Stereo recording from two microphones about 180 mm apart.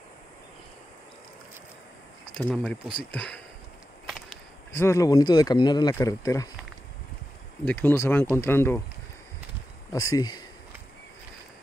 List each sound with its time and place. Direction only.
2.3 s speech: 5° left (ahead or behind)
4.7 s speech: 15° left (ahead or behind)
7.6 s speech: 10° left (ahead or behind)
9.9 s speech: 20° left (ahead or behind)